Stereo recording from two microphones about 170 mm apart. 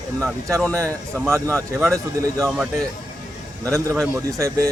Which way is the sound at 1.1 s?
15° right (ahead or behind).